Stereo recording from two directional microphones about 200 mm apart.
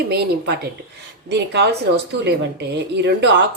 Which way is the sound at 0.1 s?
55° right (ahead or behind).